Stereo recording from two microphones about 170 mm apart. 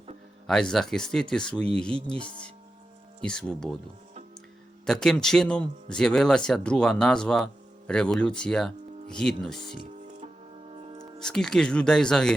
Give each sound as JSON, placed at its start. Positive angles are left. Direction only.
{"t": 0.4, "sound": "a man's voice", "side_deg": 5}
{"t": 4.9, "sound": "a man's voice", "side_deg": 5}
{"t": 9.8, "sound": "music", "side_deg": -50}
{"t": 11.2, "sound": "a man's voice", "side_deg": 5}